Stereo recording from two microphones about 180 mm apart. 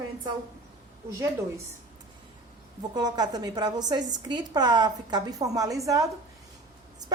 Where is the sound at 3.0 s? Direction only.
20° right (ahead or behind).